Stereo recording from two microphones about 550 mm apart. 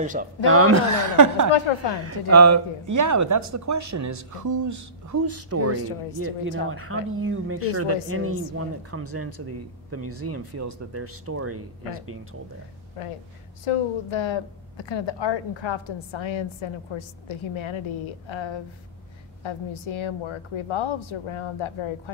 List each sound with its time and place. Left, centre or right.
0.0 s speech: centre
0.5 s speech: right
13.0 s a woman's voice: left
13.7 s a woman's voice: left